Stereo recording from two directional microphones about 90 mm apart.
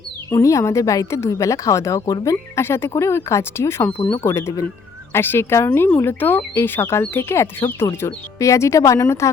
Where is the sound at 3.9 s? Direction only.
60° left (ahead or behind).